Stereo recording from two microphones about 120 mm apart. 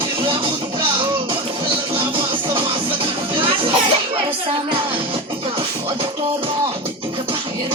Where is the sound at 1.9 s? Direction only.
45° right (ahead or behind).